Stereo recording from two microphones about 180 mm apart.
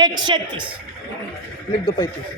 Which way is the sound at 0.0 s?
25° right (ahead or behind).